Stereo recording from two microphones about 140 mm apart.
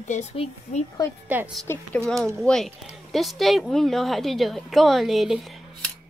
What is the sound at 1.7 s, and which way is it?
Speech, 20° left (ahead or behind).